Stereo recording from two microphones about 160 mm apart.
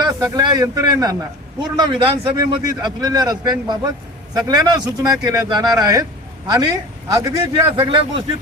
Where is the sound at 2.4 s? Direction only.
25° right (ahead or behind).